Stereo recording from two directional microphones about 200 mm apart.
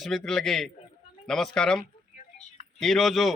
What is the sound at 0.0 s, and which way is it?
A man's voice, centre (ahead or behind).